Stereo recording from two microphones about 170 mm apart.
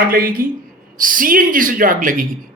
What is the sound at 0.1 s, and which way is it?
Speech, 60° right (ahead or behind).